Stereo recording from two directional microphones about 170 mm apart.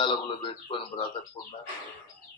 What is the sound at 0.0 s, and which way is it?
Speech, 30° left (ahead or behind).